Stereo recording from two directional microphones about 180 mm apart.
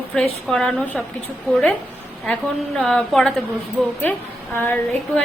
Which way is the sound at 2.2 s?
5° left (ahead or behind).